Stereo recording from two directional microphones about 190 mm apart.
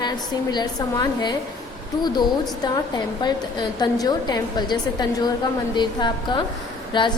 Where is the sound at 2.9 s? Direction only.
20° left (ahead or behind).